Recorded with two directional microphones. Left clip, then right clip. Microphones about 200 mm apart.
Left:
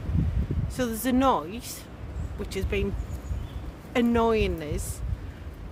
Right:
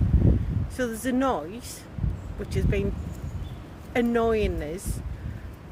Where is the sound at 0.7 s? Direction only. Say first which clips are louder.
Even; 15° left (ahead or behind).